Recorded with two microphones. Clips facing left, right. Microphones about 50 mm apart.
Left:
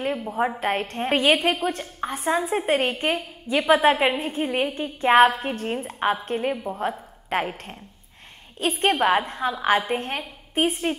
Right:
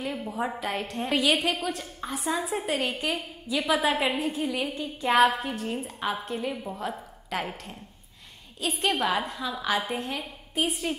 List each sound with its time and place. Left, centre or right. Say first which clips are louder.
0.6 s a woman's voice: left 5 dB; left